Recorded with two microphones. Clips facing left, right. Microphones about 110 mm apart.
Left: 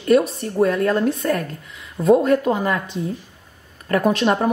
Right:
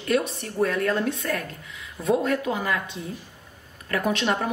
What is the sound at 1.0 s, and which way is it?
A woman's voice, 40° left (ahead or behind).